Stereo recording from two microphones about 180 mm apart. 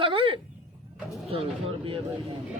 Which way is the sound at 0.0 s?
30° right (ahead or behind).